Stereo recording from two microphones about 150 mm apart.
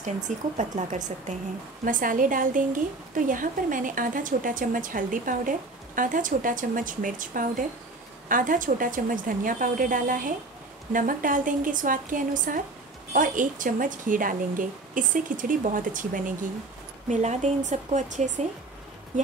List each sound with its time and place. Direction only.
0.6 s speech: 50° right (ahead or behind)
1.9 s a woman's voice: 60° right (ahead or behind)
17.1 s speech: 50° right (ahead or behind)